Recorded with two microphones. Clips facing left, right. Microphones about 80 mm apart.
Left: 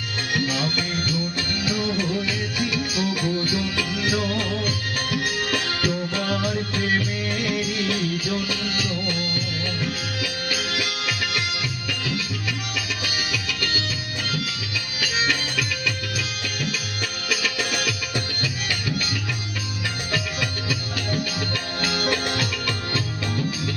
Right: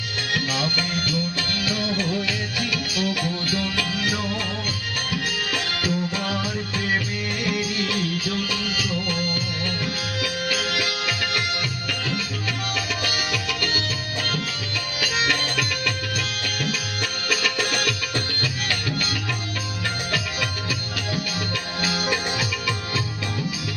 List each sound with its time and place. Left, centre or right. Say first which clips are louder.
0.5 s music: even; centre
2.7 s music: left 1 dB; left
3.9 s music: left 2 dB; centre
5.7 s music: even; centre
7.4 s music: right 1 dB; centre
10.5 s music: right 2 dB; centre
13.0 s music: right 2 dB; centre
15.0 s music: right 1 dB; centre
17.2 s music: right 2 dB; centre
20.1 s music: even; centre